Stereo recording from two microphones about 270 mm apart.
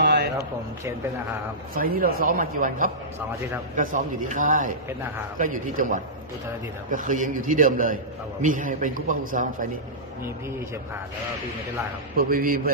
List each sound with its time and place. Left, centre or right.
0.0 s a sound: right
1.8 s a man's voice: right
12.2 s speech: right